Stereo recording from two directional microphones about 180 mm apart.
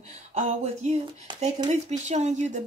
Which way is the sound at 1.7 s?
40° right (ahead or behind).